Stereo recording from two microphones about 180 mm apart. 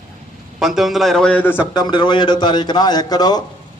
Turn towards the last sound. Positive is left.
turn(degrees=20)  # may be behind; listen again after turning